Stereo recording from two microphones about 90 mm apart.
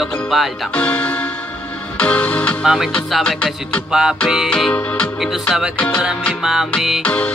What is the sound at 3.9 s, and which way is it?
Music, 5° right (ahead or behind).